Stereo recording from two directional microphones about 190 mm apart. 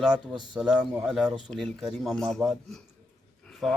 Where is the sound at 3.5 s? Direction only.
Centre (ahead or behind).